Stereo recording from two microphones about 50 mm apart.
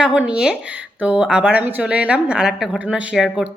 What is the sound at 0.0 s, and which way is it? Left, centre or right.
Speech, centre.